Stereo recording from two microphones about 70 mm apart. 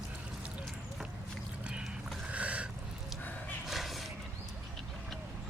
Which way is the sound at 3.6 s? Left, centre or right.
Centre.